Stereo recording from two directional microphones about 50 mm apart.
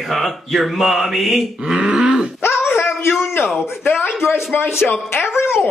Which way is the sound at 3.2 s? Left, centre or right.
Left.